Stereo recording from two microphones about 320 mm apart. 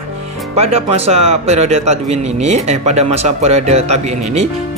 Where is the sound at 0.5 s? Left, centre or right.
Centre.